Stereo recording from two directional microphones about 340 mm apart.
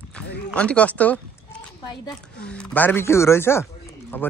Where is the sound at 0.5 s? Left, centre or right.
Centre.